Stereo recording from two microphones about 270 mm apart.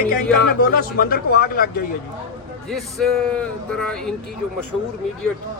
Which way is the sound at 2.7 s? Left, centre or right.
Centre.